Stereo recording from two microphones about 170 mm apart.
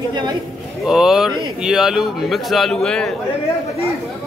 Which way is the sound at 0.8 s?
5° right (ahead or behind).